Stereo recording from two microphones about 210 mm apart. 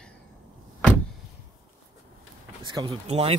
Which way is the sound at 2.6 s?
20° right (ahead or behind).